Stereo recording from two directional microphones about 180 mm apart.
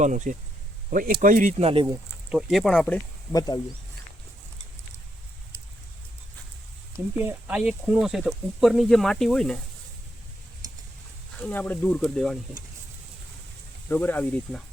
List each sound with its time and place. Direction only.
0.0 s speech: 45° right (ahead or behind)
1.6 s speech: 30° right (ahead or behind)
2.3 s speech: centre (ahead or behind)
3.3 s speech: 20° left (ahead or behind)
7.2 s speech: 10° right (ahead or behind)
11.3 s speech: 10° left (ahead or behind)
13.8 s speech: 10° left (ahead or behind)